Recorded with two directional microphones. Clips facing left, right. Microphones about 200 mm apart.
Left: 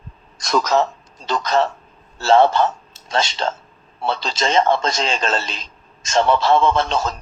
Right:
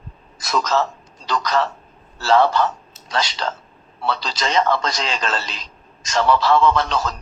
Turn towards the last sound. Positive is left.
turn(degrees=25)  # may be behind; listen again after turning